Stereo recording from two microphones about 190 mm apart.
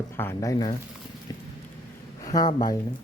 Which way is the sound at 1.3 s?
20° left (ahead or behind).